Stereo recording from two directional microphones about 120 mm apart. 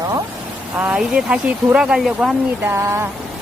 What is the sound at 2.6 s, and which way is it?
Speech, 20° right (ahead or behind).